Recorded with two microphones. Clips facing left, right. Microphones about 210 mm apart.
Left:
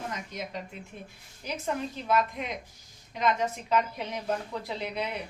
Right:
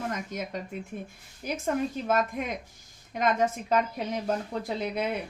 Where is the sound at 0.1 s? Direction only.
50° right (ahead or behind).